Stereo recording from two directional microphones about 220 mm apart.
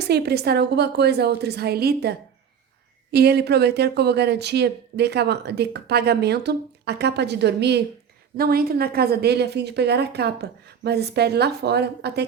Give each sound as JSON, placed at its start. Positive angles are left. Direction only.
{"t": 0.1, "sound": "speech", "side_deg": -45}